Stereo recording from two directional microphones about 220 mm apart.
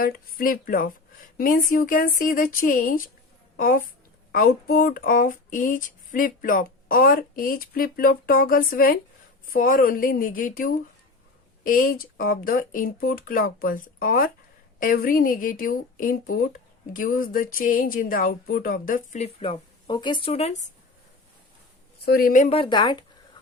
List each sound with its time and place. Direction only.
0.0 s speech: 40° left (ahead or behind)
22.0 s speech: 45° left (ahead or behind); by 23.4 s 20° left (ahead or behind)